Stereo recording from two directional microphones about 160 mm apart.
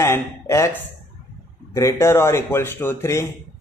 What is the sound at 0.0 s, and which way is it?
Speech, 15° left (ahead or behind).